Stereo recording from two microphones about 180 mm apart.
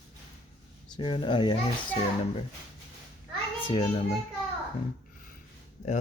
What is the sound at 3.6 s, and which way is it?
Speech, 30° left (ahead or behind).